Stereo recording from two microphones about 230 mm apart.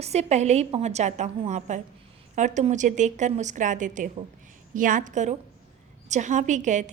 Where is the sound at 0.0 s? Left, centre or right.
Right.